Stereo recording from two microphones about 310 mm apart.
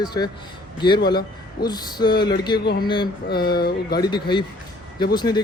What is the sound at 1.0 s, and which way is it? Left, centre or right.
Speech, left.